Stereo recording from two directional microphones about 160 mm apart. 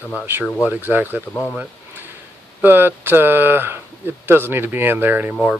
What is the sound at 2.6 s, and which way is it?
Speech, 10° right (ahead or behind).